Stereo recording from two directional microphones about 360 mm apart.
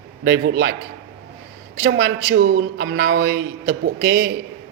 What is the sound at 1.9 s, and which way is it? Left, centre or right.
Speech, right.